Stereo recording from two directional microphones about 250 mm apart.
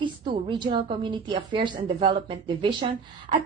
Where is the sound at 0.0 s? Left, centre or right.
Centre.